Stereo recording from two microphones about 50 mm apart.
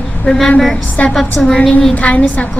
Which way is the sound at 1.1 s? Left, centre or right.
Centre.